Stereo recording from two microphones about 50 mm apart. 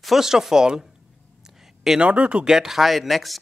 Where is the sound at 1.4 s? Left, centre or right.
Centre.